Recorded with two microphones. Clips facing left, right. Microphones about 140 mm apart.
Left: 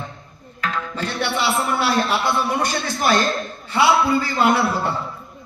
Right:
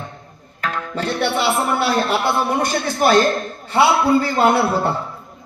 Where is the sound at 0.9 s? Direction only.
55° right (ahead or behind).